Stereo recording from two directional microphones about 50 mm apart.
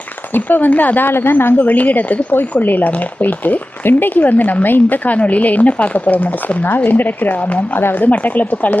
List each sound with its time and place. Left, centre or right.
0.3 s speech: left
1.6 s speech: left
7.8 s speech: left